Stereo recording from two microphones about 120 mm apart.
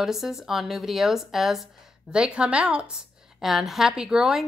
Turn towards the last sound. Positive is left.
turn(degrees=-5)  # may be behind; listen again after turning